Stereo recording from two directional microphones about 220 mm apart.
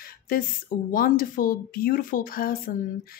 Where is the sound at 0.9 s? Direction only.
40° left (ahead or behind).